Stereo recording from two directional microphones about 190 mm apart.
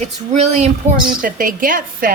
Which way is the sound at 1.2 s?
45° right (ahead or behind).